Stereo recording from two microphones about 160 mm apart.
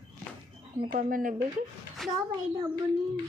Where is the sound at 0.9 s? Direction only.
60° right (ahead or behind).